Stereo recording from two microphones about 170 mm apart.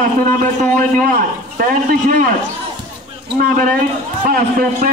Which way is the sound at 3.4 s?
55° right (ahead or behind).